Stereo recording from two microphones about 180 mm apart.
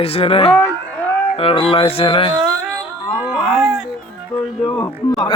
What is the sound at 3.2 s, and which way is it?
Livestock, 5° right (ahead or behind).